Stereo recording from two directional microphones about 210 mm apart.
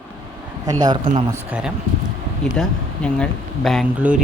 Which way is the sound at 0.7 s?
20° right (ahead or behind).